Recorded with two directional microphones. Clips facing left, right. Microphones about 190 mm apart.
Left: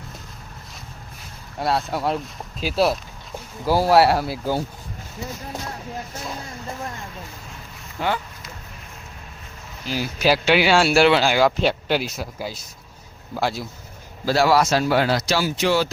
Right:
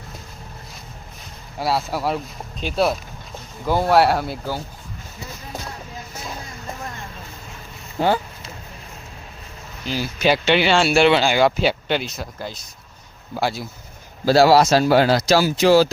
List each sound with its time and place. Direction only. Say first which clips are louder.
1.5 s speech: even; centre (ahead or behind)
7.9 s vehicle: right 5 dB; 30° right (ahead or behind)
9.8 s speech: right 1 dB; 5° left (ahead or behind)
14.3 s a man's voice: right 4 dB; 30° right (ahead or behind)